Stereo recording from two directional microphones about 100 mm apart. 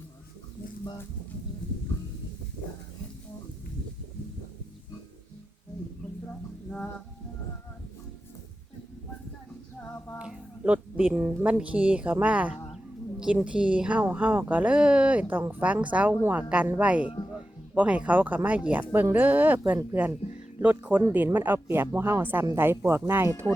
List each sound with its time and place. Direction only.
6.7 s music: 10° left (ahead or behind)
10.2 s a sound: 10° right (ahead or behind)
11.5 s speech: 10° right (ahead or behind)